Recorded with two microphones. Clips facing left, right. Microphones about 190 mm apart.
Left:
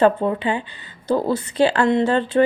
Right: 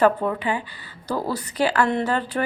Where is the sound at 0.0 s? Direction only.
25° left (ahead or behind).